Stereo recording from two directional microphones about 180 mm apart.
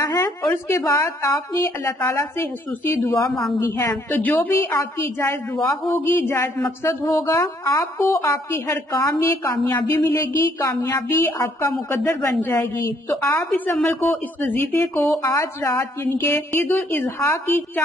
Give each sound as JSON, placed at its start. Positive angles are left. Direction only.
{"t": 0.0, "sound": "a sound", "side_deg": 20}
{"t": 0.5, "sound": "a woman's voice", "side_deg": 15}
{"t": 3.3, "sound": "a woman's voice", "side_deg": 0}
{"t": 3.5, "sound": "a woman's voice", "side_deg": 15}